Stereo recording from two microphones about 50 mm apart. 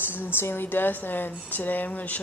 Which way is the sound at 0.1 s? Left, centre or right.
Left.